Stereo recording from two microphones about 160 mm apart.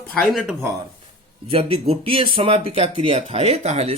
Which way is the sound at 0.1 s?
Centre (ahead or behind).